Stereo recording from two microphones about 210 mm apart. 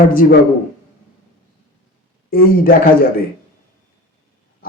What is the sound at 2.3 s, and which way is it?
Speech, 45° left (ahead or behind).